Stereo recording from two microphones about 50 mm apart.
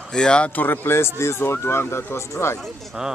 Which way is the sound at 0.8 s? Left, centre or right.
Left.